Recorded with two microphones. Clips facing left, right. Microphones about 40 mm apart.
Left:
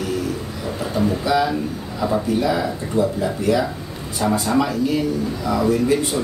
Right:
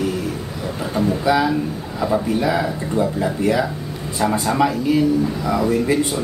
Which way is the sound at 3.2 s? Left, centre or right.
Centre.